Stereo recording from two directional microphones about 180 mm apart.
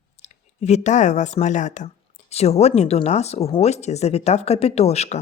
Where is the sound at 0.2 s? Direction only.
40° left (ahead or behind).